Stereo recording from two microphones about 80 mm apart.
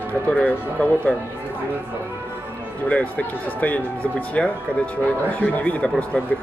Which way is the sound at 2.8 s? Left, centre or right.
Centre.